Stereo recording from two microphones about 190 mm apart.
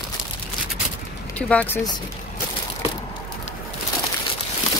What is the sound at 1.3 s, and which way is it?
Speech, 5° left (ahead or behind).